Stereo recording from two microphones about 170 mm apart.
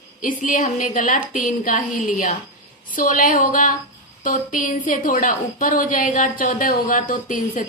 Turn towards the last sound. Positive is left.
turn(degrees=50)  # may be behind; listen again after turning